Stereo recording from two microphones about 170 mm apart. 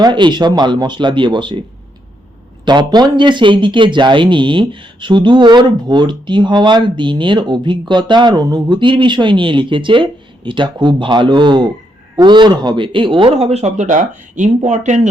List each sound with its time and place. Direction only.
0.0 s speech: 25° right (ahead or behind)
2.6 s speech: 25° right (ahead or behind); by 15.1 s 45° right (ahead or behind)